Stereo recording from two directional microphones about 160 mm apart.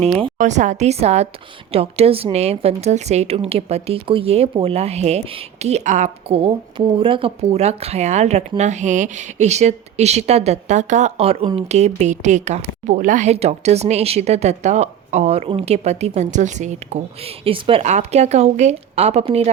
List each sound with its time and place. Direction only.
0.0 s a woman's voice: 40° right (ahead or behind)
6.2 s speech: 35° right (ahead or behind)